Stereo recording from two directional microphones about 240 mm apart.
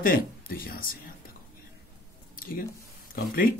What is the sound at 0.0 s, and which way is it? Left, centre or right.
Speech, left.